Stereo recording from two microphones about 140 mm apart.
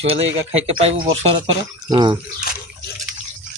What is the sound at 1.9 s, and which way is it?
Speech, 30° right (ahead or behind).